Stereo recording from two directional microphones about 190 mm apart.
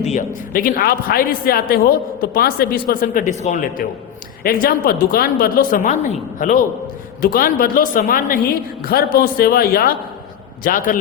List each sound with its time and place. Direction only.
0.1 s a woman's voice: 45° left (ahead or behind)